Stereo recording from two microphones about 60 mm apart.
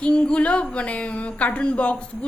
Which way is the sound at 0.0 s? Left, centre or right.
Centre.